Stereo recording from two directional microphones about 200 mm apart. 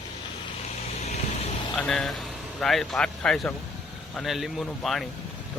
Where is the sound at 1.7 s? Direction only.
Centre (ahead or behind).